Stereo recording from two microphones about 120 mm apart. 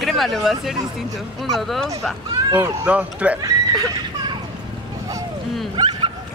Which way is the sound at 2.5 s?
20° right (ahead or behind).